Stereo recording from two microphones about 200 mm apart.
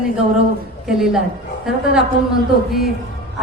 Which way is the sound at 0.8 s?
Centre (ahead or behind).